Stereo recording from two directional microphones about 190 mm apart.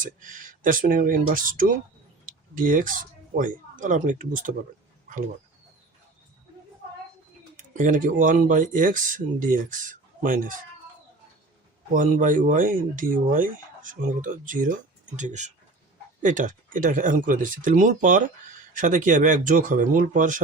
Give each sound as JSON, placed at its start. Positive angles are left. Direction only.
{"t": 0.0, "sound": "speech", "side_deg": -45}
{"t": 7.8, "sound": "speech", "side_deg": -45}
{"t": 11.9, "sound": "speech", "side_deg": -45}